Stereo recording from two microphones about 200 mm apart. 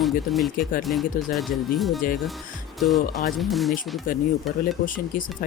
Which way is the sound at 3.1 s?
Centre (ahead or behind).